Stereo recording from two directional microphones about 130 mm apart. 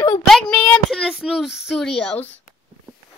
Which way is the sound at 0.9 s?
5° right (ahead or behind).